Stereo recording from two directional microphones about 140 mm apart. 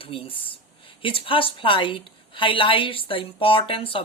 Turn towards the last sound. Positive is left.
turn(degrees=40)  # may be behind; listen again after turning